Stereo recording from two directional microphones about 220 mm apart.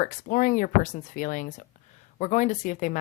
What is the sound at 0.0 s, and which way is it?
Speech, 40° left (ahead or behind).